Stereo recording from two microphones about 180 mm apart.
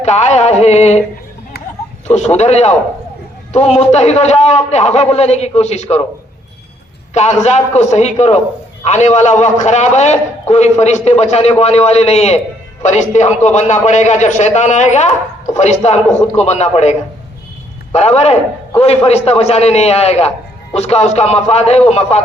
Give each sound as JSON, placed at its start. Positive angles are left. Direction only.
{"t": 0.0, "sound": "a man's voice", "side_deg": 40}
{"t": 2.0, "sound": "a man's voice", "side_deg": 40}
{"t": 7.1, "sound": "a man's voice", "side_deg": 40}
{"t": 17.9, "sound": "a man's voice", "side_deg": 35}